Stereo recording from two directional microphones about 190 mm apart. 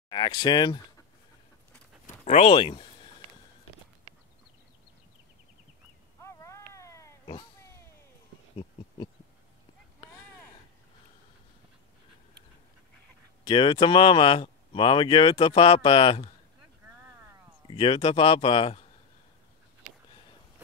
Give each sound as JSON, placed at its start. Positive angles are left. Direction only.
{"t": 0.1, "sound": "speech", "side_deg": 25}
{"t": 2.2, "sound": "speech", "side_deg": 35}
{"t": 6.2, "sound": "cat", "side_deg": 15}
{"t": 8.5, "sound": "a sound", "side_deg": 25}
{"t": 13.5, "sound": "speech", "side_deg": 25}
{"t": 17.6, "sound": "speech", "side_deg": 30}